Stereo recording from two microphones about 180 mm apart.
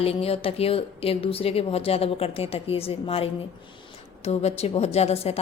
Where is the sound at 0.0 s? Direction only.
35° left (ahead or behind).